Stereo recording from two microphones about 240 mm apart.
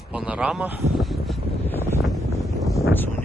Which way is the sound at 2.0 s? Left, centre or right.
Centre.